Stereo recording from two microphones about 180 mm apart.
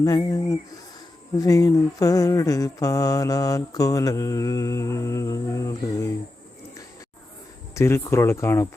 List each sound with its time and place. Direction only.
0.0 s mantra: 20° left (ahead or behind)
7.8 s speech: 15° left (ahead or behind)